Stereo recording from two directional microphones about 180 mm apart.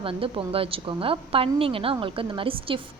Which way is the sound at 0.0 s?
30° right (ahead or behind).